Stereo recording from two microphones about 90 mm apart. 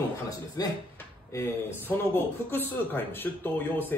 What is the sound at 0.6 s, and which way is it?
Speech, 45° left (ahead or behind).